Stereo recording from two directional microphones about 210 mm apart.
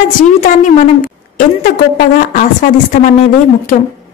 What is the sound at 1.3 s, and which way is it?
A woman's voice, 40° left (ahead or behind).